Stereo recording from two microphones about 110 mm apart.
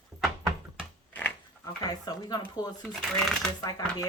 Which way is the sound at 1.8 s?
35° left (ahead or behind).